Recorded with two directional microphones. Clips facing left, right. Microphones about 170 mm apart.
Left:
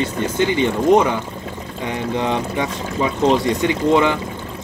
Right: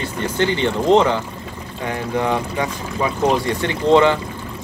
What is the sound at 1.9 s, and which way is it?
Speech, 20° left (ahead or behind).